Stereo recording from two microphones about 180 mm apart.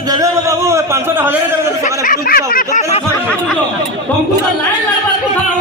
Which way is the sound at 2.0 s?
55° left (ahead or behind).